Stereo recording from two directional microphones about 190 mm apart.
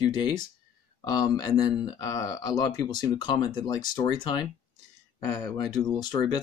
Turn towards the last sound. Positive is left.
turn(degrees=25)  # may be behind; listen again after turning